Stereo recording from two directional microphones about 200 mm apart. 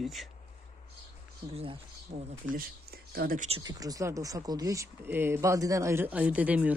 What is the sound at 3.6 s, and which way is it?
Speech, 20° right (ahead or behind).